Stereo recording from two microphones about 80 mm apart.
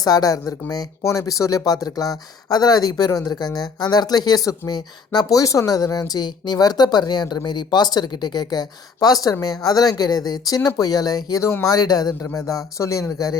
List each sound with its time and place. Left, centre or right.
0.0 s speech: left